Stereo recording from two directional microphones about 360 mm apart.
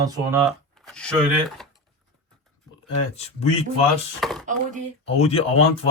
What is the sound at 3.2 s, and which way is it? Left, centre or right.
Speech, centre.